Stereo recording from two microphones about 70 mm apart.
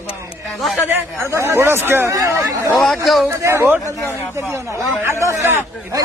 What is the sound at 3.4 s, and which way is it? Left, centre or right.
A man's voice, right.